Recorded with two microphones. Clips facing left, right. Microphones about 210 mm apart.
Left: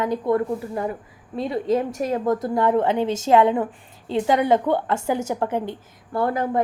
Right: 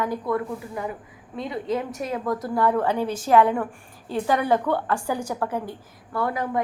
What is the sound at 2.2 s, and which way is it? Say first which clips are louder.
A woman's voice: left 1 dB; 25° left (ahead or behind).